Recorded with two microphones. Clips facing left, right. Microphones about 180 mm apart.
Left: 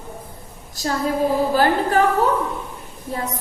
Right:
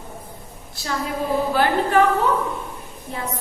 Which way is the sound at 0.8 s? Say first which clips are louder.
Left 5 dB; 40° left (ahead or behind).